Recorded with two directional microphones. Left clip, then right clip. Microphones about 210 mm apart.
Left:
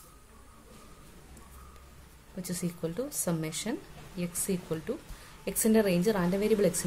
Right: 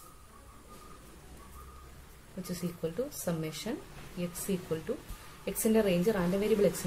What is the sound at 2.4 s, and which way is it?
Speech, 40° left (ahead or behind).